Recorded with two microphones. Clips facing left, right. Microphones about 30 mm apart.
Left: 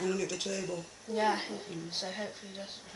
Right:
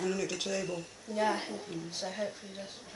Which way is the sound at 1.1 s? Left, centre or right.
Centre.